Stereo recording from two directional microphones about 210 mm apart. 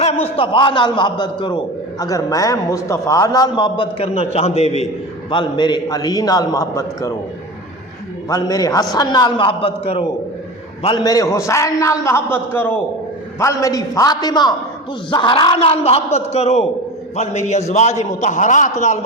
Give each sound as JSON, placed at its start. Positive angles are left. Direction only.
{"t": 0.0, "sound": "a man's voice", "side_deg": 30}
{"t": 8.3, "sound": "a man's voice", "side_deg": 15}
{"t": 13.4, "sound": "a man's voice", "side_deg": 15}